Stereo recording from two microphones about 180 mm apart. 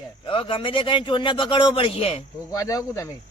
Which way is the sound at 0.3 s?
30° left (ahead or behind).